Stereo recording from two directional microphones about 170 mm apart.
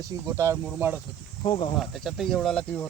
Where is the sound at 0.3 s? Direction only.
15° right (ahead or behind).